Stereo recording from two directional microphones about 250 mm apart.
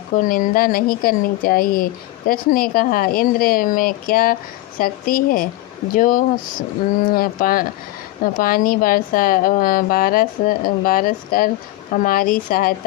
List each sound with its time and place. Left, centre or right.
0.2 s speech: left